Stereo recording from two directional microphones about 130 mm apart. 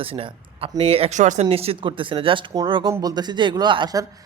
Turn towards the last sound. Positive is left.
turn(degrees=-30)  # may be behind; listen again after turning